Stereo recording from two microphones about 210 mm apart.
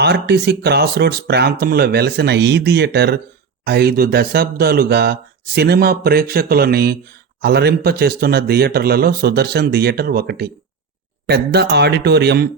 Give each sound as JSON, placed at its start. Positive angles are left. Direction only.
{"t": 0.0, "sound": "speech", "side_deg": -50}